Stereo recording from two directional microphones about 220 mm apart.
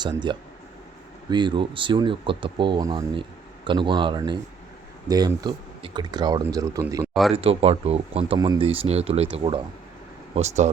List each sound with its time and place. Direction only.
0.0 s speech: 20° right (ahead or behind)
7.1 s speech: centre (ahead or behind)
7.3 s speech: 25° right (ahead or behind)